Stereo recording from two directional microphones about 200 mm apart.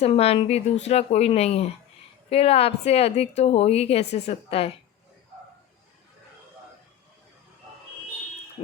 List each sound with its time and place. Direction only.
0.0 s a woman's voice: 30° left (ahead or behind)